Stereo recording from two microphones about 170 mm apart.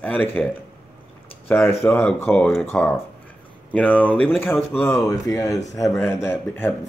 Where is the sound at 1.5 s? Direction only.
15° left (ahead or behind).